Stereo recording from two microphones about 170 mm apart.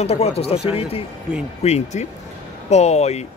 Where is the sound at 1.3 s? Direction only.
5° right (ahead or behind).